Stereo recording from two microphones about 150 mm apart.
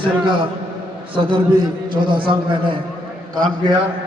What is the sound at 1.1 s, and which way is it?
A man's voice, 35° right (ahead or behind).